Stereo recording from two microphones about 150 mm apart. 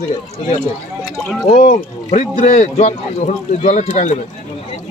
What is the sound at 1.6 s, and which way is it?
Speech, 55° left (ahead or behind).